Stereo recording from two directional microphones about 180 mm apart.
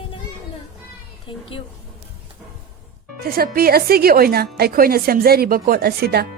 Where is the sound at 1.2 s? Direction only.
30° left (ahead or behind).